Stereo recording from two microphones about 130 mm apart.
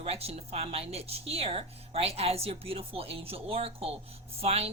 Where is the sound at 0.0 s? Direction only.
50° right (ahead or behind).